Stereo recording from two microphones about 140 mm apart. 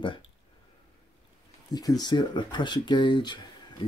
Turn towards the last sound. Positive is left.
turn(degrees=35)  # may be behind; listen again after turning